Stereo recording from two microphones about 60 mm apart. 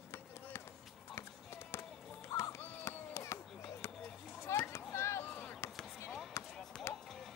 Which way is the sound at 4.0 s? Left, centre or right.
Centre.